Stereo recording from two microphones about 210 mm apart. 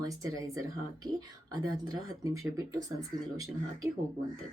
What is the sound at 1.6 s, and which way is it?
Speech, 20° right (ahead or behind).